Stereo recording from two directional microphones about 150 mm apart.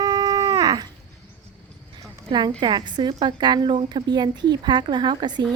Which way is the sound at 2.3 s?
30° right (ahead or behind).